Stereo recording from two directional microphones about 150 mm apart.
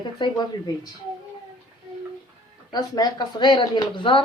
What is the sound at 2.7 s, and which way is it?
A woman's voice, 25° left (ahead or behind).